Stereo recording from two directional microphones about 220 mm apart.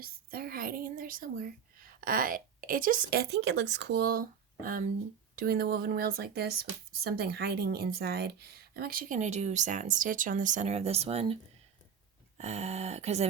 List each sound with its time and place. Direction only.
0.0 s speech: 45° right (ahead or behind); by 11.3 s 25° right (ahead or behind)
12.4 s speech: 30° right (ahead or behind)